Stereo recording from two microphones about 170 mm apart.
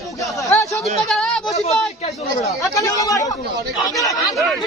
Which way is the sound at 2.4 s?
20° left (ahead or behind).